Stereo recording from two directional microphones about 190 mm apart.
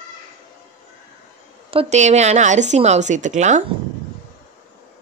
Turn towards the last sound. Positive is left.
turn(degrees=-40)  # may be behind; listen again after turning